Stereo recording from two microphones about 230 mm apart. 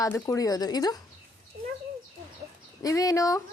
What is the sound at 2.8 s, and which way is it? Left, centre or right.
Speech, centre.